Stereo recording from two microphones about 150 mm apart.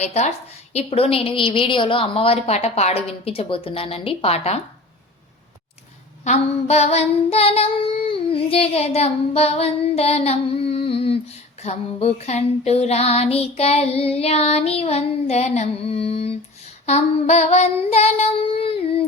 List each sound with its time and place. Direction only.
0.0 s a woman's voice: 45° left (ahead or behind)
6.2 s child singing: 45° left (ahead or behind)